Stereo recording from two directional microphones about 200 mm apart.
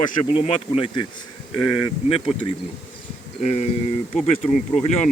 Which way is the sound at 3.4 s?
30° left (ahead or behind).